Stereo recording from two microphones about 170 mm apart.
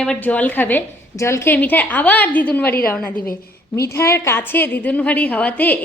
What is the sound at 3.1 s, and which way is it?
Speech, 60° left (ahead or behind).